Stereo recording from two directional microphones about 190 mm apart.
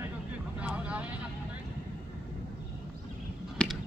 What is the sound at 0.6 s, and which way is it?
Vehicle, 5° right (ahead or behind).